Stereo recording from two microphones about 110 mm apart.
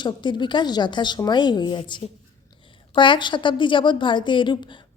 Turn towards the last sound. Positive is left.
turn(degrees=45)  # may be behind; listen again after turning